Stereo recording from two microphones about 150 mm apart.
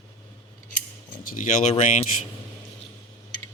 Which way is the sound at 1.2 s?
65° left (ahead or behind).